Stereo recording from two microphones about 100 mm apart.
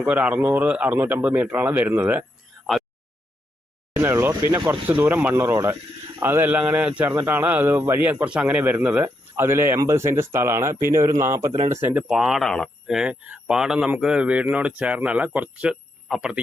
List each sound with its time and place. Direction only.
0.0 s speech: 15° right (ahead or behind)
3.9 s speech: 25° right (ahead or behind)
11.9 s speech: 5° right (ahead or behind)